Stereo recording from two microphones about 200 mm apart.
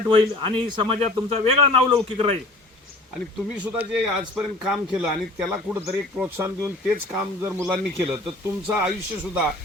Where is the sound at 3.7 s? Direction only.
5° right (ahead or behind).